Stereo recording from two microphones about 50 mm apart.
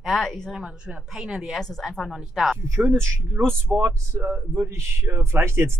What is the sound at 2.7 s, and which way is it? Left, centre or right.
Speech, right.